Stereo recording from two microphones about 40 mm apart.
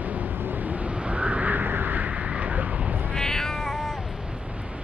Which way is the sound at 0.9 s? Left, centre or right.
Right.